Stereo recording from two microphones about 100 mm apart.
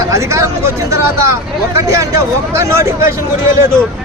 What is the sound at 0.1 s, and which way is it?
Speech, 30° right (ahead or behind).